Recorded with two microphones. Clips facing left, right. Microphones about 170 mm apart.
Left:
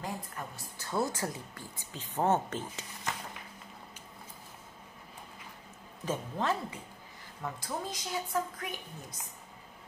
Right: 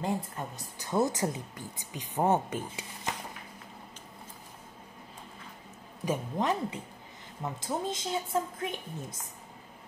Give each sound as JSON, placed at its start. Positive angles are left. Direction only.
{"t": 0.0, "sound": "a woman's voice", "side_deg": -20}
{"t": 6.0, "sound": "a woman's voice", "side_deg": -15}